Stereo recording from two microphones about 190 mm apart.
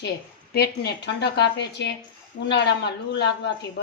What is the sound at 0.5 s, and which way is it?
A woman's voice, 55° left (ahead or behind).